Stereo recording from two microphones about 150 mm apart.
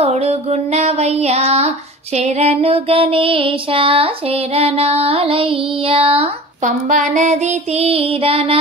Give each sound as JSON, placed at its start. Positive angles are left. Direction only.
{"t": 0.0, "sound": "child singing", "side_deg": -45}
{"t": 2.1, "sound": "music", "side_deg": -50}
{"t": 6.6, "sound": "child singing", "side_deg": -55}